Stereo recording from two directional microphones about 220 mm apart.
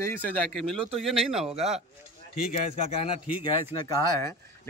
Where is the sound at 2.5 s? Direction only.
30° left (ahead or behind).